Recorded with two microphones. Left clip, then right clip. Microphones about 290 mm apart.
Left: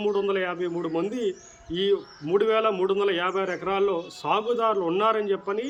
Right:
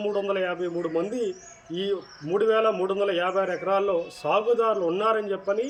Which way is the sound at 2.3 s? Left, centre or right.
Centre.